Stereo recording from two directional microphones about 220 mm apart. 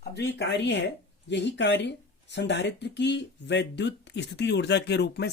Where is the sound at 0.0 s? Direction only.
50° left (ahead or behind).